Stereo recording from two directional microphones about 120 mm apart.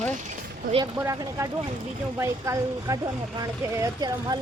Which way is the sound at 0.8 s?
25° right (ahead or behind).